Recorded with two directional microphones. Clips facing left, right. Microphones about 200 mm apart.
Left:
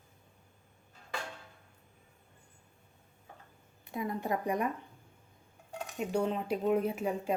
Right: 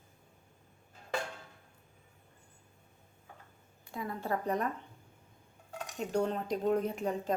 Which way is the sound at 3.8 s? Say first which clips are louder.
Left 3 dB; 20° left (ahead or behind).